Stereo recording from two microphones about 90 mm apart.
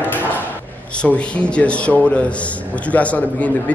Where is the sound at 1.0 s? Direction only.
15° left (ahead or behind).